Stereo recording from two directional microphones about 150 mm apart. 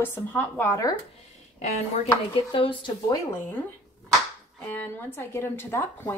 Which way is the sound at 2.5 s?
35° left (ahead or behind).